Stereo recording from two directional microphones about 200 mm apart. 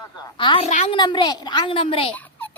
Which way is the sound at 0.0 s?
20° left (ahead or behind).